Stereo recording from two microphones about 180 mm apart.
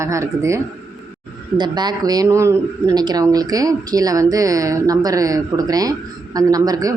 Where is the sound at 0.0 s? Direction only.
15° right (ahead or behind).